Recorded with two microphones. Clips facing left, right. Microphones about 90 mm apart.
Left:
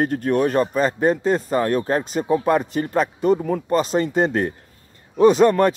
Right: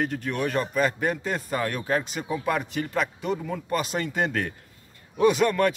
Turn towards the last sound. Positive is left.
turn(degrees=35)  # may be behind; listen again after turning